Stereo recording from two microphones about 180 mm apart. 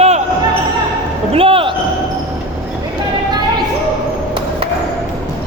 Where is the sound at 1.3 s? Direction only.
30° right (ahead or behind).